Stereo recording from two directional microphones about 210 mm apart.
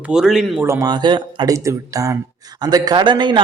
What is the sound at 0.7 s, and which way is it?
A man's voice, 15° right (ahead or behind).